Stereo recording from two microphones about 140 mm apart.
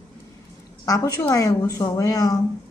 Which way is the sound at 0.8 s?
25° left (ahead or behind).